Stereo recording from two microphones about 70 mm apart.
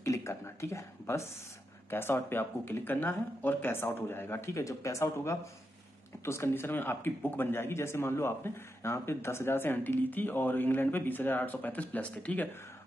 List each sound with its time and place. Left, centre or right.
0.0 s speech: left; by 12.4 s centre